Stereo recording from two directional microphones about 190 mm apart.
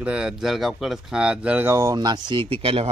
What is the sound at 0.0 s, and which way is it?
Speech, 5° right (ahead or behind).